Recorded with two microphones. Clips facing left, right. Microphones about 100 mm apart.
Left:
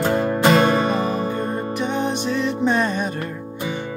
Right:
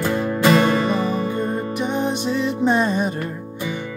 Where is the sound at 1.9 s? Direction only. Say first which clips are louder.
Right 1 dB; 10° right (ahead or behind).